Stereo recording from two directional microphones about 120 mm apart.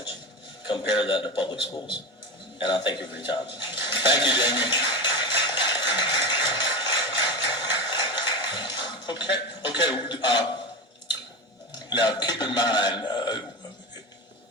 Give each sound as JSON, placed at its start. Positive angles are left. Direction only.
{"t": 0.7, "sound": "a man's voice", "side_deg": 45}
{"t": 2.6, "sound": "a sound", "side_deg": 40}
{"t": 11.7, "sound": "a man's voice", "side_deg": 35}